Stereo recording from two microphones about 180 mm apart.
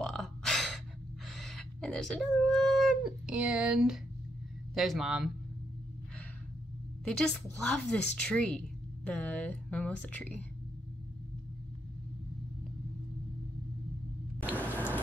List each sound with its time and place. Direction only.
0.0 s gasp: 5° left (ahead or behind)
1.2 s speech: centre (ahead or behind)
7.1 s a woman's voice: 5° left (ahead or behind)
14.5 s a sound: 10° left (ahead or behind)